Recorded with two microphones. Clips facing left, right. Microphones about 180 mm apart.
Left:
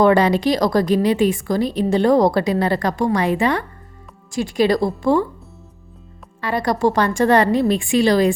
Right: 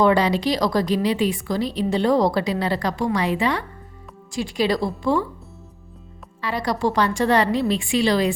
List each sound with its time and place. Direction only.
0.0 s a woman's voice: 50° left (ahead or behind)
6.4 s a woman's voice: 50° left (ahead or behind)